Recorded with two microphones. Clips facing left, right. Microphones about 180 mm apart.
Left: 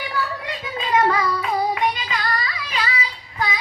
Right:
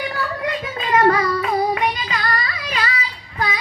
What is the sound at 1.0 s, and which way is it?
Child singing, 45° right (ahead or behind).